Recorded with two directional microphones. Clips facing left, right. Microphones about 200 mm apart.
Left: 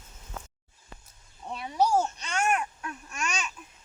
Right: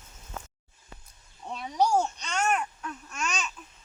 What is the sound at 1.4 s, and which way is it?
Babbling, 5° left (ahead or behind).